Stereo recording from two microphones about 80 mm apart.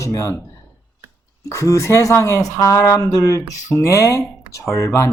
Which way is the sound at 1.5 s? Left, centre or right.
Left.